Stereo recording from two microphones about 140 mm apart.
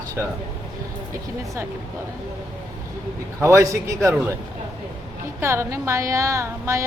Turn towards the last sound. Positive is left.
turn(degrees=-20)  # may be behind; listen again after turning